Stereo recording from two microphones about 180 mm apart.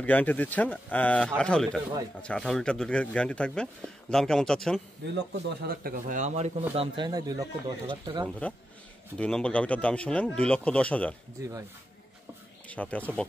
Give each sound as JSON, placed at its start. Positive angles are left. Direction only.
{"t": 0.0, "sound": "speech", "side_deg": 10}
{"t": 5.0, "sound": "speech", "side_deg": -65}
{"t": 7.1, "sound": "speech", "side_deg": -20}
{"t": 9.2, "sound": "speech", "side_deg": 5}
{"t": 12.6, "sound": "speech", "side_deg": 10}